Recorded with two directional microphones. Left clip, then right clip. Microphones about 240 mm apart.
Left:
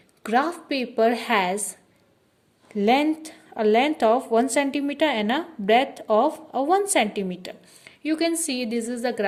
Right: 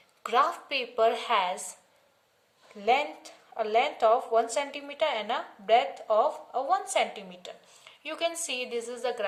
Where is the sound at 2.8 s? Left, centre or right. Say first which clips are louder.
Left 6 dB; left.